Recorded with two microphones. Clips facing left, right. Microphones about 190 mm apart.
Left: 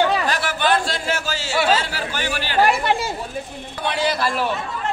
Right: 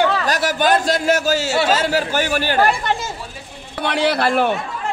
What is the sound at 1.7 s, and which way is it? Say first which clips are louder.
Speech: right 4 dB; 45° right (ahead or behind).